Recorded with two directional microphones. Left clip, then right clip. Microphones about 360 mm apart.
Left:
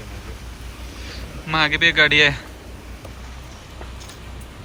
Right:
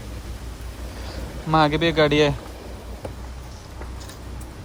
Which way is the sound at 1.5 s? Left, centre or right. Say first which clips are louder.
Left 2 dB; centre.